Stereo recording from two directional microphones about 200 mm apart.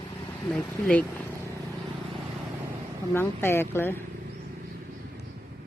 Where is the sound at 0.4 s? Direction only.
5° left (ahead or behind).